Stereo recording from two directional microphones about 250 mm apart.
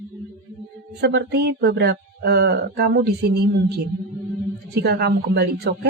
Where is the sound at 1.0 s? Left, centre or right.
Right.